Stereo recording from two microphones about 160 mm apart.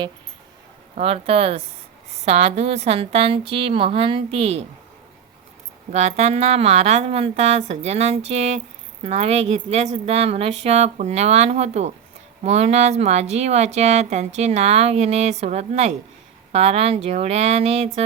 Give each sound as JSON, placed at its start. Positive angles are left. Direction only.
{"t": 0.9, "sound": "a woman's voice", "side_deg": -40}
{"t": 5.9, "sound": "a woman's voice", "side_deg": -45}